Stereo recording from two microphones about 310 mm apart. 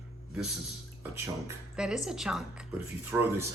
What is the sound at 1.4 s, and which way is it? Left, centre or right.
Speech, centre.